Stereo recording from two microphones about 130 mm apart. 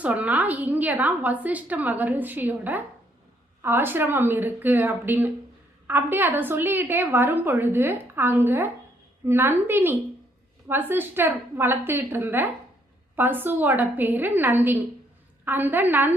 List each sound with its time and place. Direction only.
0.0 s a woman's voice: 10° right (ahead or behind)